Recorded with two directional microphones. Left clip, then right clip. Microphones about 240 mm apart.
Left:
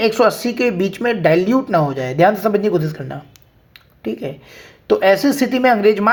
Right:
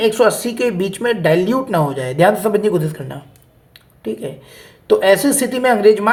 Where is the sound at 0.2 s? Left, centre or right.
Left.